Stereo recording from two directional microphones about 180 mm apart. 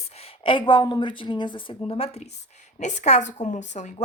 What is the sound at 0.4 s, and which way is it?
A woman's voice, 25° left (ahead or behind).